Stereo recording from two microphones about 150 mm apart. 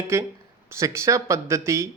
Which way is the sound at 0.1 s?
15° right (ahead or behind).